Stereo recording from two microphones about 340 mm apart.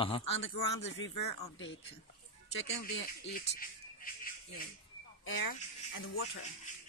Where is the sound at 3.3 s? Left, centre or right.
Left.